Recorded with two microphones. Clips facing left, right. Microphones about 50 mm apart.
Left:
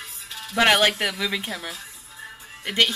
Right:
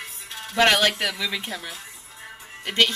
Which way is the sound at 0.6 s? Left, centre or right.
Centre.